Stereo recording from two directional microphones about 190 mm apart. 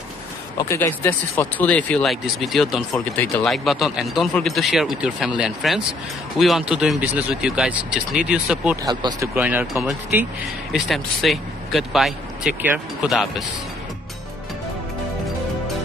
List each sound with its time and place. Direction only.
0.6 s speech: 15° left (ahead or behind); by 8.7 s 5° right (ahead or behind)
8.8 s speech: 20° right (ahead or behind)
9.3 s speech: 10° right (ahead or behind)